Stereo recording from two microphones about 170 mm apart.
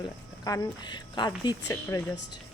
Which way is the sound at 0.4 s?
20° left (ahead or behind).